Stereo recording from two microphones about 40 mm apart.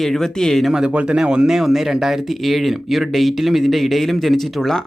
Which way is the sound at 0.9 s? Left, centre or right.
Right.